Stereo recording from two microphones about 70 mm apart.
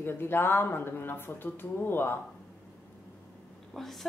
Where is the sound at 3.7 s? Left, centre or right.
Centre.